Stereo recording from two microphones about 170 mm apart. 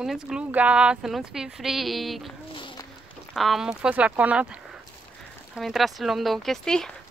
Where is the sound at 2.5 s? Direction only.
30° left (ahead or behind).